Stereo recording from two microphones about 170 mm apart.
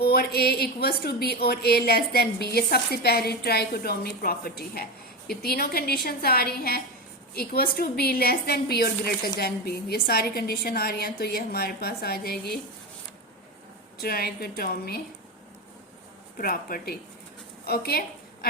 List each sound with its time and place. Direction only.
0.0 s a woman's voice: 65° left (ahead or behind)
14.0 s a woman's voice: 65° left (ahead or behind)
16.4 s a woman's voice: 55° left (ahead or behind)